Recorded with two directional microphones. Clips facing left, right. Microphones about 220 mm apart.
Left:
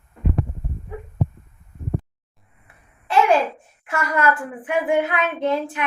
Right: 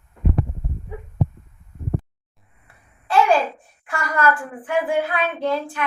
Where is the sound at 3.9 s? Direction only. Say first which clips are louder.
Even; 20° left (ahead or behind).